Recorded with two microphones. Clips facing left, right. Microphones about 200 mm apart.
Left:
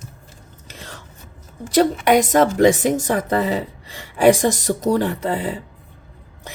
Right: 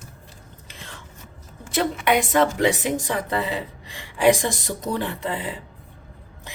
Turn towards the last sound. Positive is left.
turn(degrees=40)  # may be behind; listen again after turning